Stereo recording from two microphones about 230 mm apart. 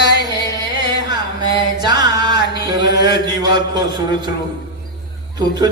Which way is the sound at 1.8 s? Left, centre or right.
Centre.